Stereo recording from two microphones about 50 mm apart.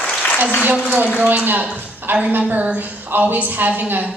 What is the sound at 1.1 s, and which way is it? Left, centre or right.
A woman's voice, right.